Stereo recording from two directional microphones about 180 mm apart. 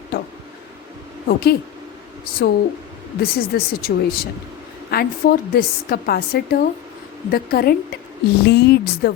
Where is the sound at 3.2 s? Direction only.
60° left (ahead or behind).